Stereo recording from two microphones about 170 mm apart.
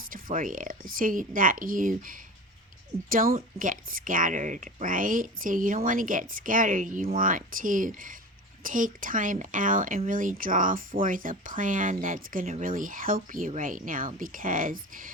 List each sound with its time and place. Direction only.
0.1 s a woman's voice: 55° right (ahead or behind)